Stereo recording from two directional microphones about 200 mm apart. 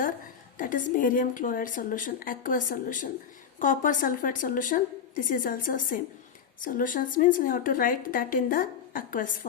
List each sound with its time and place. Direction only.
0.6 s a woman's voice: 40° left (ahead or behind)